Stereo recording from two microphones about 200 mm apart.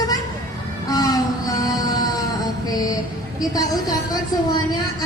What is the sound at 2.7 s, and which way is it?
A woman's voice, 20° left (ahead or behind).